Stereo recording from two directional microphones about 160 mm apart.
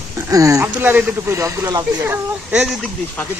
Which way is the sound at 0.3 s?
20° right (ahead or behind).